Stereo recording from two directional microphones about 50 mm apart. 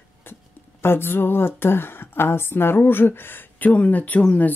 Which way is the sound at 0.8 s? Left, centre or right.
Left.